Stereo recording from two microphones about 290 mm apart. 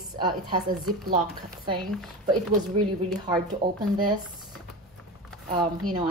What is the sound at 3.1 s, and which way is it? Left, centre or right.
Speech, centre.